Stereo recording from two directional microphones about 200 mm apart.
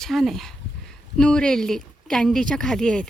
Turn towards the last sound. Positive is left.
turn(degrees=5)  # may be behind; listen again after turning